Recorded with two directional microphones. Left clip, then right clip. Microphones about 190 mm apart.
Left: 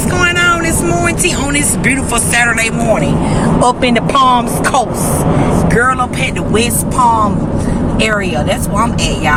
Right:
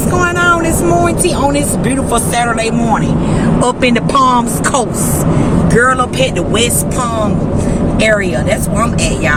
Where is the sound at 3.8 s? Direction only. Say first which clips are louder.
Right 2 dB; 60° right (ahead or behind).